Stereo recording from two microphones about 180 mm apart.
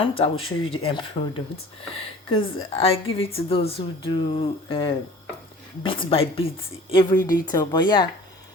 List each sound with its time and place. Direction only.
0.0 s a woman's voice: 30° left (ahead or behind)